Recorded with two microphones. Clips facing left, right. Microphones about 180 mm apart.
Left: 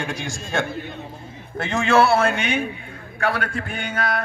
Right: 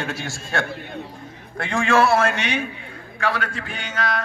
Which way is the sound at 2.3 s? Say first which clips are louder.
Left 2 dB; 55° left (ahead or behind).